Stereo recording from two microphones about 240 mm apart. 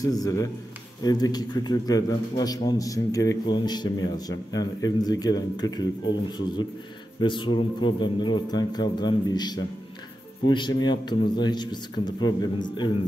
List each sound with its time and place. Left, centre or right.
0.0 s a man's voice: centre
7.2 s a man's voice: centre